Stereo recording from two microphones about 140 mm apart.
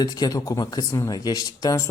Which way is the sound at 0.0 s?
25° left (ahead or behind).